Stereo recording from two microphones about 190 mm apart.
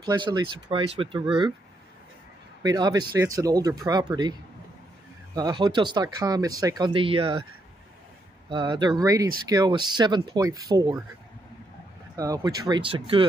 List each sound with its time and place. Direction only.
0.0 s speech: 25° right (ahead or behind)
2.6 s speech: 20° right (ahead or behind)
8.5 s speech: 25° right (ahead or behind)
12.2 s speech: 20° right (ahead or behind)